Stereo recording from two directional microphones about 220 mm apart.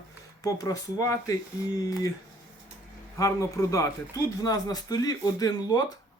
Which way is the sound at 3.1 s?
15° left (ahead or behind).